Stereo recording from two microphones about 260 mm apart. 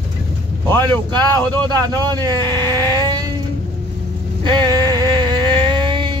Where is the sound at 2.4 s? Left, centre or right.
Centre.